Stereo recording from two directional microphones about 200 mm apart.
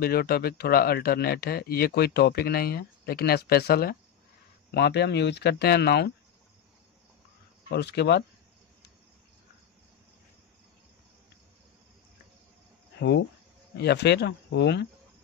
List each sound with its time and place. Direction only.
0.0 s speech: 50° left (ahead or behind)
7.7 s speech: 55° left (ahead or behind)
13.7 s speech: 55° left (ahead or behind)